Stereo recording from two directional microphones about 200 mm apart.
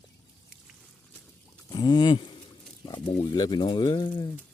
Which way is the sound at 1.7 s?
20° left (ahead or behind).